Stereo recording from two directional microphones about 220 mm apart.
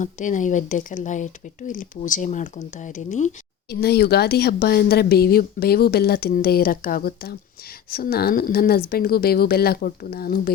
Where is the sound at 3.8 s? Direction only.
45° left (ahead or behind).